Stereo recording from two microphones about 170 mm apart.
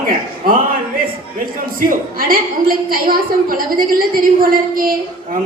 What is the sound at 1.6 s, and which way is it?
A woman's voice, 55° right (ahead or behind).